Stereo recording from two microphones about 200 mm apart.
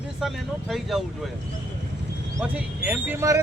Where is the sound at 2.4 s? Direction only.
10° right (ahead or behind).